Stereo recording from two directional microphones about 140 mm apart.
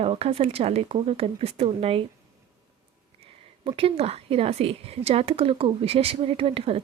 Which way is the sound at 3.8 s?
45° right (ahead or behind).